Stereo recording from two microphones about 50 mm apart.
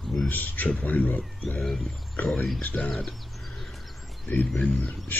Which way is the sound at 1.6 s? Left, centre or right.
Centre.